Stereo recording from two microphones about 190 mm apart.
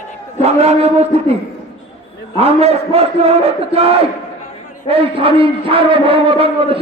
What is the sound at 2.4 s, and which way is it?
A man's voice, 35° right (ahead or behind).